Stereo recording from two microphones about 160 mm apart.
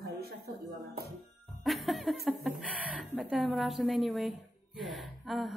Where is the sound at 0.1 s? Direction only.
80° right.